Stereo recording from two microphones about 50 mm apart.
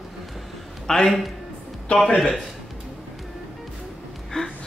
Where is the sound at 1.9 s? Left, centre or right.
Left.